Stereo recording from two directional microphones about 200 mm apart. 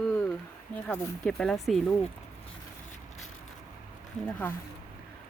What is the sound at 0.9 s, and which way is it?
Speech, 5° left (ahead or behind).